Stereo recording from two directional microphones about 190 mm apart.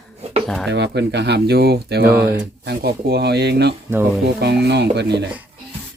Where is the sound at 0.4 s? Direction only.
Centre (ahead or behind).